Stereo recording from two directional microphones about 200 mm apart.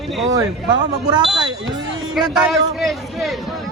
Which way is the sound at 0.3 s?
20° right (ahead or behind).